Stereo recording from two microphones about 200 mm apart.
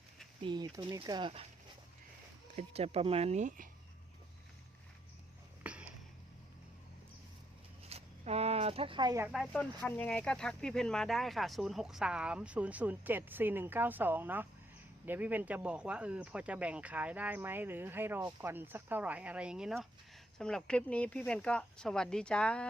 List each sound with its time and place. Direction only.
0.4 s speech: 20° right (ahead or behind)
2.6 s speech: 30° right (ahead or behind)
5.6 s a sound: 5° right (ahead or behind)
7.9 s zipper: 30° right (ahead or behind)
9.3 s speech: centre (ahead or behind)